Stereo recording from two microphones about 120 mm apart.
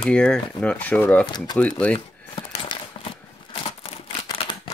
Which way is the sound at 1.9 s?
50° left (ahead or behind).